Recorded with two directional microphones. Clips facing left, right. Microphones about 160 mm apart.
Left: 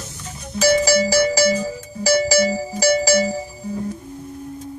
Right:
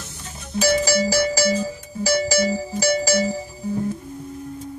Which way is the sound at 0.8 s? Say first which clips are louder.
Left 3 dB; 75° left (ahead or behind).